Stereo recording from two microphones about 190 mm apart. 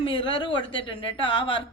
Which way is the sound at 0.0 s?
25° left (ahead or behind).